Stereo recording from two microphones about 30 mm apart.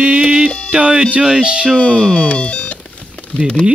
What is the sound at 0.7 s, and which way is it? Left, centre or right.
Speech, right.